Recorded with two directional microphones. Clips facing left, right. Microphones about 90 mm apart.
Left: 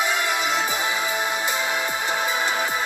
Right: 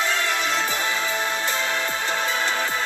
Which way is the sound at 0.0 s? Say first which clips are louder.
Left 1 dB; 15° left (ahead or behind).